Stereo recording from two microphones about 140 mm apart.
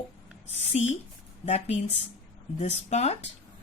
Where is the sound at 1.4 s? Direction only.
50° left (ahead or behind).